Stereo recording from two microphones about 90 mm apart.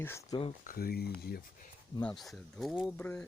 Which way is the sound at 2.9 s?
15° left (ahead or behind).